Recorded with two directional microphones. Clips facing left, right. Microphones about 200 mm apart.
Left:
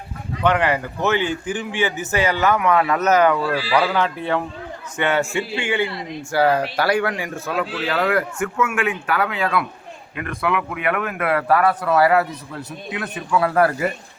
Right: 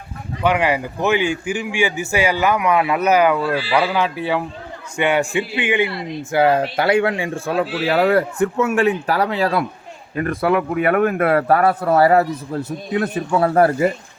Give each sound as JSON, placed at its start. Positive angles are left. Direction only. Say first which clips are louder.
{"t": 0.4, "sound": "a man's voice", "louder": "right 1 dB", "side_deg": -10}